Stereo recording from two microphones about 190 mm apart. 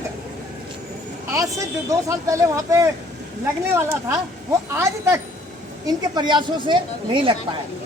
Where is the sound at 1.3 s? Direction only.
15° right (ahead or behind).